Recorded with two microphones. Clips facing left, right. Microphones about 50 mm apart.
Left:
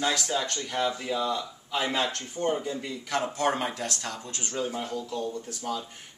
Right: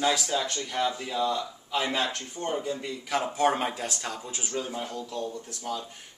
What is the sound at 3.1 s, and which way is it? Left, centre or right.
Speech, centre.